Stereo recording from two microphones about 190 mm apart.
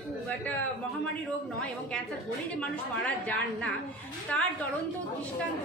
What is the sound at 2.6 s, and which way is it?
A woman's voice, 5° left (ahead or behind).